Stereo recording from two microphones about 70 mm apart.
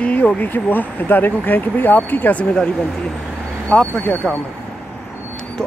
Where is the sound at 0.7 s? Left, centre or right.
Left.